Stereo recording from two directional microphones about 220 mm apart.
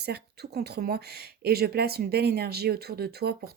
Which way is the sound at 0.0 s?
45° right (ahead or behind).